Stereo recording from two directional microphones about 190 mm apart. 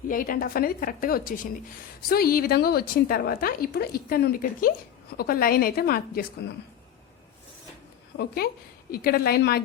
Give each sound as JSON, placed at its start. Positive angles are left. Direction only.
{"t": 0.1, "sound": "a woman's voice", "side_deg": 45}
{"t": 8.1, "sound": "a woman's voice", "side_deg": 60}